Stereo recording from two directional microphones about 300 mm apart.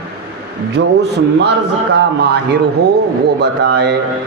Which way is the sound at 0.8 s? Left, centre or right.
Right.